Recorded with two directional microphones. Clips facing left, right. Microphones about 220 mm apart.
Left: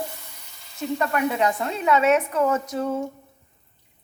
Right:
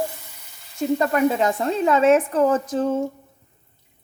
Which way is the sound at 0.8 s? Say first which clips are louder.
Right 5 dB; 30° right (ahead or behind).